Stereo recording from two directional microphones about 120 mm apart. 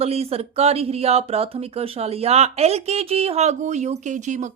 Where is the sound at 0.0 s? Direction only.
55° right (ahead or behind).